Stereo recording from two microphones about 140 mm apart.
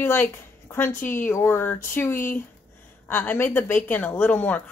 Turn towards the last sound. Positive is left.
turn(degrees=10)  # may be behind; listen again after turning